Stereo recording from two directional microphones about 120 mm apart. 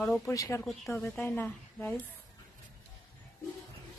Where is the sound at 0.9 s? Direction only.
15° left (ahead or behind).